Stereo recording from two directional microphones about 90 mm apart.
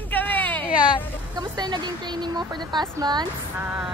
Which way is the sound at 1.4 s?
55° right (ahead or behind).